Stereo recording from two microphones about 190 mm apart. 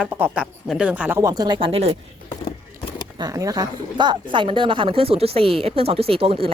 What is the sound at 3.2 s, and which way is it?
Speech, 20° right (ahead or behind).